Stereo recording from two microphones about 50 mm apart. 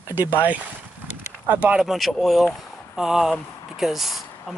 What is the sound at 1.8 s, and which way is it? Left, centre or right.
Speech, centre.